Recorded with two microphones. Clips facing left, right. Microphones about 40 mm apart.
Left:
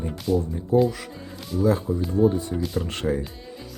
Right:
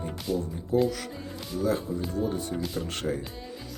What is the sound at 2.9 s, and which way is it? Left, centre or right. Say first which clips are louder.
Speech: left 5 dB; left.